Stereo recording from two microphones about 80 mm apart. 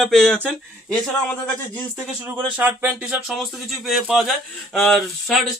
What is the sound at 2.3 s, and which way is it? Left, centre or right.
Speech, right.